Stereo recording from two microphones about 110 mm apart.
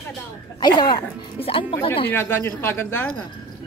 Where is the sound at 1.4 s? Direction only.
55° left (ahead or behind).